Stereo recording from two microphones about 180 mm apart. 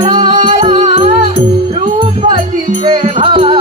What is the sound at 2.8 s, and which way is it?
Music, 25° right (ahead or behind).